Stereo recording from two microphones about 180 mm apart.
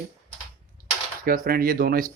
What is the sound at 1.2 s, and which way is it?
Speech, 55° right (ahead or behind).